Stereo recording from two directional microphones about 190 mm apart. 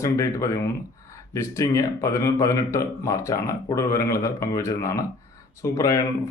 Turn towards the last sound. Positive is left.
turn(degrees=15)  # may be behind; listen again after turning